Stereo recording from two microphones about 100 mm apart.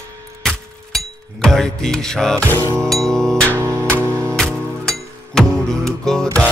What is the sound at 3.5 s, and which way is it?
Music, 25° right (ahead or behind).